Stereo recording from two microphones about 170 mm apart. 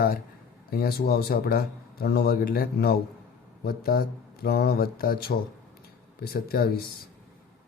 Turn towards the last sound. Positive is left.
turn(degrees=65)  # may be behind; listen again after turning